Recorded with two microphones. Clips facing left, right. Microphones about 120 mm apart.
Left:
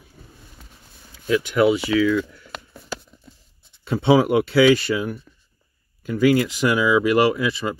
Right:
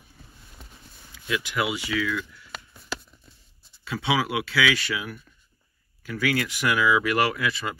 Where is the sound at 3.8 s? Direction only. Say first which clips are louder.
Left 9 dB; 30° left (ahead or behind).